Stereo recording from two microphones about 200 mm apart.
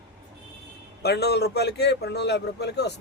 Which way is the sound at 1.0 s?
55° left (ahead or behind).